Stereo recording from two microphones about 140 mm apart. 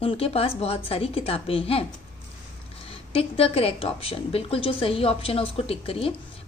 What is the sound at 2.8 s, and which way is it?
A woman's voice, 45° left (ahead or behind).